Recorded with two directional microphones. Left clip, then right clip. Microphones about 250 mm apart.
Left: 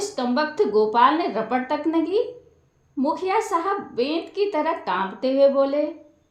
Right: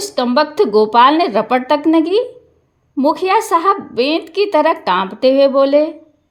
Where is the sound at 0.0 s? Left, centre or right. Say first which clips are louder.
Right 9 dB; right.